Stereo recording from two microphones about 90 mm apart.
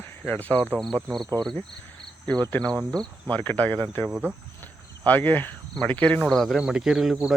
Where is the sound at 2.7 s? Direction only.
5° left (ahead or behind).